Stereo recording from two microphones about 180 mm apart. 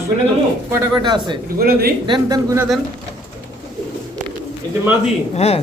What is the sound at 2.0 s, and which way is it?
Speech, 25° right (ahead or behind).